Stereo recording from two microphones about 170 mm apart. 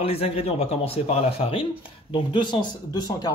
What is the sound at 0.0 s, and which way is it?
A man's voice, 35° left (ahead or behind).